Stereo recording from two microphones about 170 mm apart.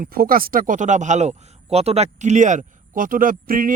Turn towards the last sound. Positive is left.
turn(degrees=-55)  # may be behind; listen again after turning